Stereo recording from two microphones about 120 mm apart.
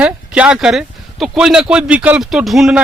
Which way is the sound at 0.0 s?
10° right (ahead or behind).